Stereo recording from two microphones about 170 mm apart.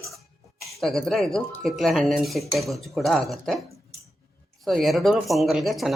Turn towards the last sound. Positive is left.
turn(degrees=0)  # may be behind; listen again after turning